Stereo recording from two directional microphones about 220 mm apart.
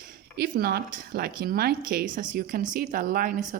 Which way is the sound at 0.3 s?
45° right (ahead or behind).